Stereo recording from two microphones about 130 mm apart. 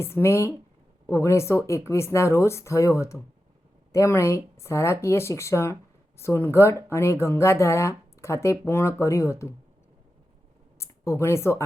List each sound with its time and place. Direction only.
0.0 s speech: 20° left (ahead or behind)
10.8 s speech: 20° left (ahead or behind)